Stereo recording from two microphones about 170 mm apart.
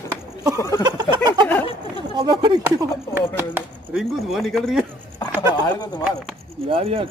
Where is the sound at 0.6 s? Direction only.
20° left (ahead or behind).